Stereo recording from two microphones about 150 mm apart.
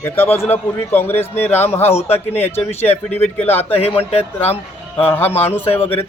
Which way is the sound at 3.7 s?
40° left (ahead or behind).